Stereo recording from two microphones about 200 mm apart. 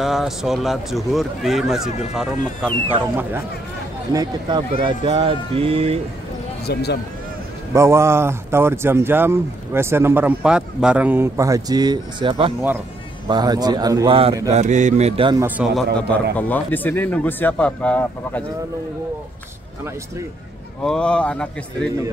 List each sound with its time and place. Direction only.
0.0 s speech: centre (ahead or behind)
4.1 s speech: 20° right (ahead or behind)
6.6 s speech: 55° left (ahead or behind)
7.7 s speech: 15° right (ahead or behind)
14.5 s speech: 35° right (ahead or behind)
15.4 s speech: 5° right (ahead or behind)
16.3 s speech: 10° left (ahead or behind)
20.8 s speech: 5° left (ahead or behind)